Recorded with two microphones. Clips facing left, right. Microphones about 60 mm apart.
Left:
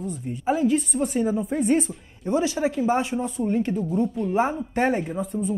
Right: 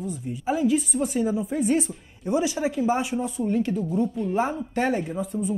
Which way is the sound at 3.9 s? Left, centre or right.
Centre.